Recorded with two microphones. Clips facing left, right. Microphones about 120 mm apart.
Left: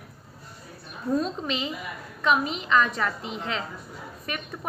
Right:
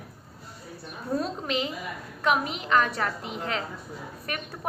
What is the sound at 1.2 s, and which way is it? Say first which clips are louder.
A woman's voice: even; 50° right (ahead or behind).